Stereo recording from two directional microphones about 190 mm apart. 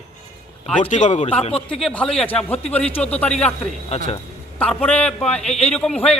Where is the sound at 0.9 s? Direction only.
40° left (ahead or behind).